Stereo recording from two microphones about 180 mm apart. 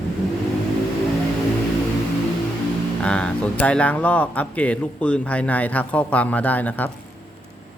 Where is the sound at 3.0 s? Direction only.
5° left (ahead or behind).